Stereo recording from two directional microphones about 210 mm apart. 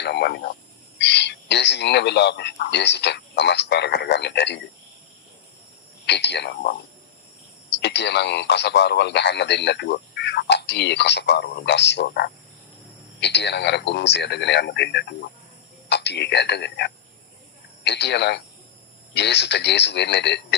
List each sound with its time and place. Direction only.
0.0 s speech: 50° left (ahead or behind)
6.1 s speech: 55° left (ahead or behind)